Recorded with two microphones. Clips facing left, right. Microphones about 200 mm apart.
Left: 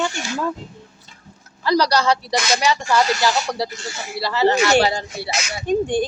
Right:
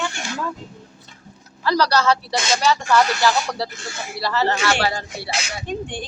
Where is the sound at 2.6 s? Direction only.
10° left (ahead or behind).